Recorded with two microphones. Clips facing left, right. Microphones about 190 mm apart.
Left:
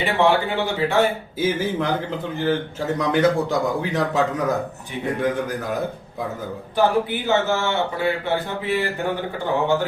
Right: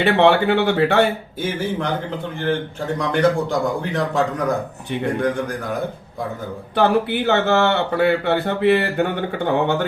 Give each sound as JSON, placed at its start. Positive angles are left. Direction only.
{"t": 0.0, "sound": "speech", "side_deg": -70}
{"t": 1.4, "sound": "a man's voice", "side_deg": 5}
{"t": 6.7, "sound": "speech", "side_deg": -65}